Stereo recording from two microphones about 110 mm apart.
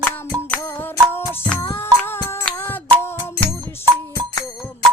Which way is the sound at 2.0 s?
20° left (ahead or behind).